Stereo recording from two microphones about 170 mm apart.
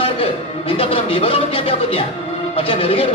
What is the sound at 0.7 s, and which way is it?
Music, 35° left (ahead or behind).